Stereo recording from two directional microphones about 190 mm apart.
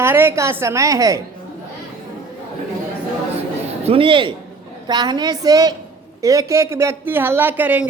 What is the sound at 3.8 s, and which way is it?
A woman's voice, 30° right (ahead or behind).